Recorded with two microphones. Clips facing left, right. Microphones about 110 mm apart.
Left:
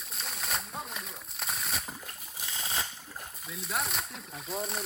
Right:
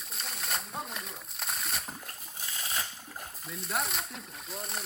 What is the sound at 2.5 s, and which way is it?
Boat, 25° left (ahead or behind).